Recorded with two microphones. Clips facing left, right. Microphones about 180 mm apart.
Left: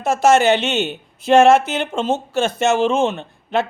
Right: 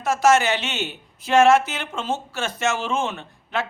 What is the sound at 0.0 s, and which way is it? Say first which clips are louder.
Speech: left 4 dB; 25° left (ahead or behind).